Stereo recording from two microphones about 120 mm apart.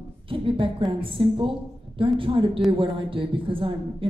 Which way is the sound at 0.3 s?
45° right (ahead or behind).